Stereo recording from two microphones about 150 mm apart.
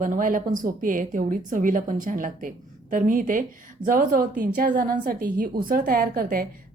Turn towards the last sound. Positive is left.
turn(degrees=-75)  # may be behind; listen again after turning